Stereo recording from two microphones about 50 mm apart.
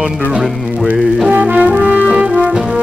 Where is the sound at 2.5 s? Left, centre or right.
Centre.